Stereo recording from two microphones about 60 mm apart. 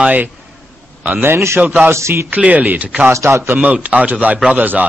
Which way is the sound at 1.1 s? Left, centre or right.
Right.